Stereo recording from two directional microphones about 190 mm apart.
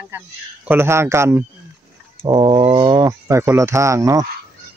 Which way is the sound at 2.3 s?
25° right (ahead or behind).